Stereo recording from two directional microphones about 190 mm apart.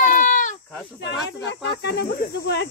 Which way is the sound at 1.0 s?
65° left (ahead or behind).